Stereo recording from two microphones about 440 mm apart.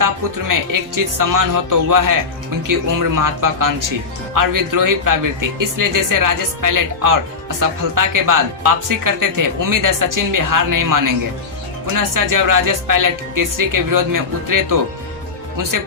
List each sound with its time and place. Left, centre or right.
0.0 s speech: right